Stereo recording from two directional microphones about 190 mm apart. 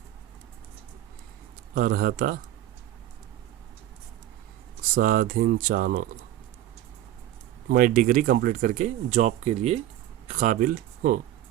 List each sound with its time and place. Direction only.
1.7 s speech: 50° right (ahead or behind)
4.8 s speech: 45° right (ahead or behind)
7.7 s speech: 45° right (ahead or behind)